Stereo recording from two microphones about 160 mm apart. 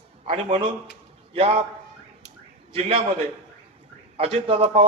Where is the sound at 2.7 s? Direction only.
40° right (ahead or behind).